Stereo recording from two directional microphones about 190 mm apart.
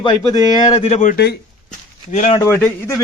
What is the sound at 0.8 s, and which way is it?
Speech, 40° left (ahead or behind).